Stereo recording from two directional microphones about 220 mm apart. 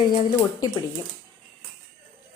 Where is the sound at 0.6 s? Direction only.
15° left (ahead or behind).